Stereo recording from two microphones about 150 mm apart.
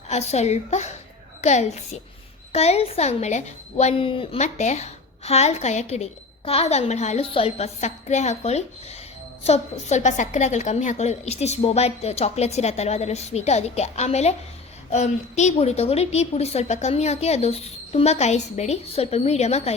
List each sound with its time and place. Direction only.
0.1 s a woman's voice: 45° left (ahead or behind)